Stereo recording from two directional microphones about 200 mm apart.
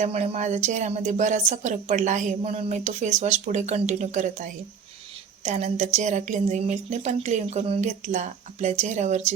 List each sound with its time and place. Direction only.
0.0 s a woman's voice: 35° right (ahead or behind)